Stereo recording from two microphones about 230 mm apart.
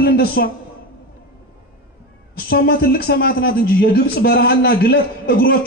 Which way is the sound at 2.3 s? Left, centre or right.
Left.